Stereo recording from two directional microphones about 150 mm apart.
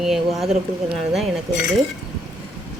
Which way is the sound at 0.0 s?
Centre (ahead or behind).